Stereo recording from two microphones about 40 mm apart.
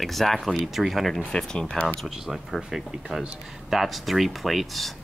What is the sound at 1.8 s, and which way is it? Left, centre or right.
Speech, centre.